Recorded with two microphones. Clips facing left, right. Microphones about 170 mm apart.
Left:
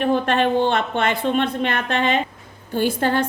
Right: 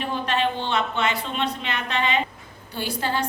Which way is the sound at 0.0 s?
50° left (ahead or behind).